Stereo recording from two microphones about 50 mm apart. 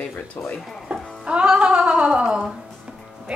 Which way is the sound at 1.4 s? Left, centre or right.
Centre.